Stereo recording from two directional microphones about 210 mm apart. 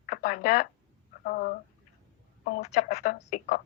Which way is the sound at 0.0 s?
40° left (ahead or behind).